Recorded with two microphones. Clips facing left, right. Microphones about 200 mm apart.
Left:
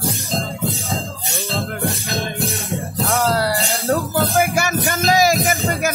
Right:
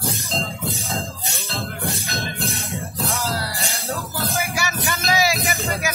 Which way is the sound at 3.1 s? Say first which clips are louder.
Left 9 dB; 60° left (ahead or behind).